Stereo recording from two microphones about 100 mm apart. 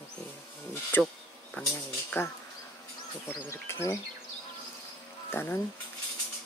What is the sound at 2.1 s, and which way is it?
Speech, 25° left (ahead or behind).